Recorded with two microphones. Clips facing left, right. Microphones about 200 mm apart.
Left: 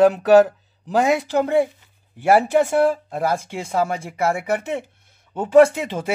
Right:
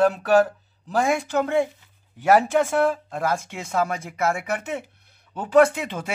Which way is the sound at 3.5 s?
30° left (ahead or behind).